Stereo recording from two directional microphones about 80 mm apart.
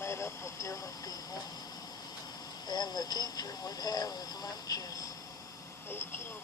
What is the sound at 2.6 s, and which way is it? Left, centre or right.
Speech, left.